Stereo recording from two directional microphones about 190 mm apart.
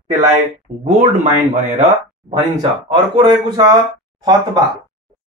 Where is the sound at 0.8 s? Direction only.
40° right (ahead or behind).